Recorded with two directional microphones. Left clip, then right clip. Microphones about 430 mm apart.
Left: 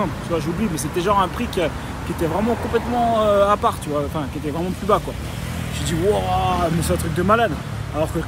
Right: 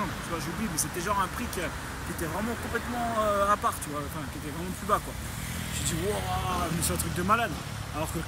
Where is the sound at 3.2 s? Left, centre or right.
Centre.